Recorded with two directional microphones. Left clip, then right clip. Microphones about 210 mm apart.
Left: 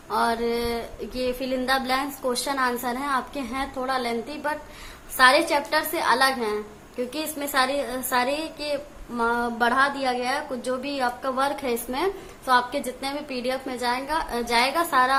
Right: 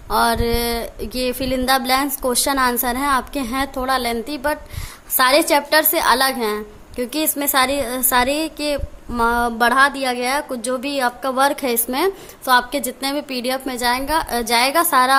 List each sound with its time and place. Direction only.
0.1 s a woman's voice: 55° right (ahead or behind)